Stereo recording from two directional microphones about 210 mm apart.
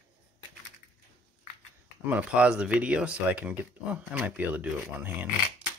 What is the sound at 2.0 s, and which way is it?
Speech, 5° right (ahead or behind).